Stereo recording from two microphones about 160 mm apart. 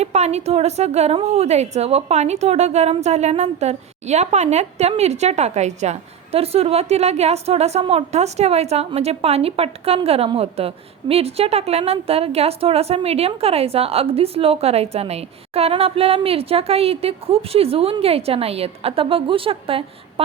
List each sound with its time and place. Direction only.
0.0 s a woman's voice: 45° right (ahead or behind)